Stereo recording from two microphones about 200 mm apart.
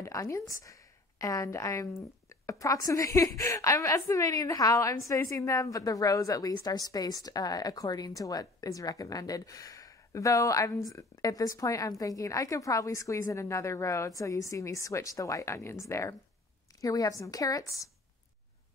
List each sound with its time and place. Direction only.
0.0 s a woman's voice: 15° left (ahead or behind)